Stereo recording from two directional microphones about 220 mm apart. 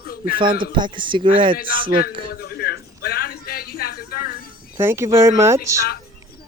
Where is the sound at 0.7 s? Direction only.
20° right (ahead or behind).